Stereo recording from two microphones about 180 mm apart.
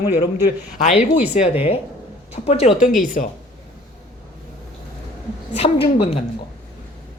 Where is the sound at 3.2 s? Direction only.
45° left (ahead or behind).